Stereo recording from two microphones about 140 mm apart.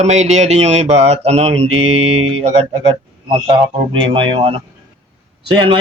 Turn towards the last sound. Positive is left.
turn(degrees=-35)  # may be behind; listen again after turning